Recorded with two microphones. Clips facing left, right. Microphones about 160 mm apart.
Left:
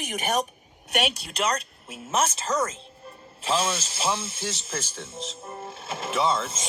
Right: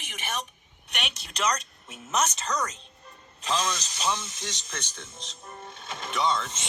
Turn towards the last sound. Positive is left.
turn(degrees=30)  # may be behind; listen again after turning